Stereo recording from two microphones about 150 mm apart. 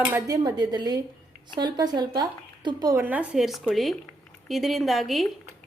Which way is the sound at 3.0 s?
10° right (ahead or behind).